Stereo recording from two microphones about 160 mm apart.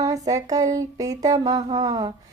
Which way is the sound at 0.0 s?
20° right (ahead or behind).